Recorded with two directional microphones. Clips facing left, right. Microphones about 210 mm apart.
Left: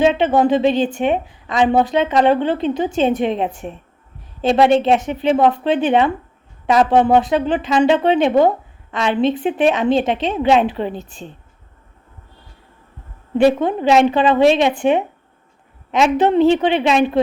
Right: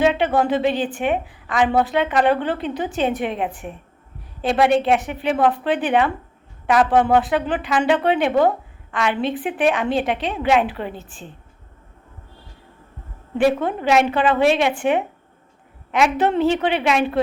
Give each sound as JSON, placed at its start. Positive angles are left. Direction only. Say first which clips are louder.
{"t": 0.0, "sound": "speech", "louder": "left 4 dB", "side_deg": 20}
{"t": 13.4, "sound": "speech", "louder": "left 4 dB", "side_deg": 20}